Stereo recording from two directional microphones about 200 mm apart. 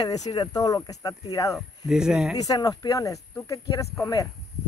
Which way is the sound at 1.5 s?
5° right (ahead or behind).